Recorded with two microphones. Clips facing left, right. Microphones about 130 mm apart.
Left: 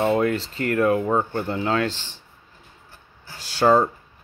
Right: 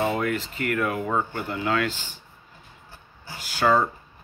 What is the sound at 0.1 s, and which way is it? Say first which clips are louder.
Speech: left 5 dB; 30° left (ahead or behind).